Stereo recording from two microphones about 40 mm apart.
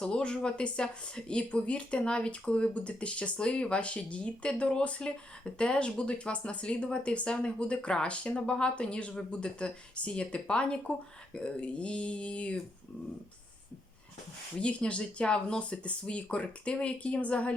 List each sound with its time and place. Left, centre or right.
0.0 s speech: left
14.6 s speech: left